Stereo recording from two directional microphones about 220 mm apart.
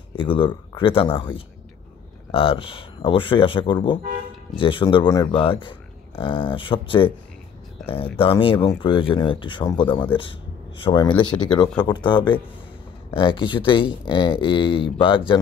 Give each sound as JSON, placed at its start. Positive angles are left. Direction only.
{"t": 0.2, "sound": "speech", "side_deg": 25}